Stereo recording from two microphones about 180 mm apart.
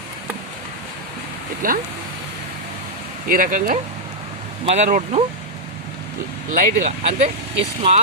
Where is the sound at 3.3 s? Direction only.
50° right (ahead or behind).